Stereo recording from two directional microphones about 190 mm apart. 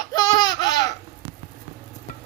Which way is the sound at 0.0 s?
20° left (ahead or behind).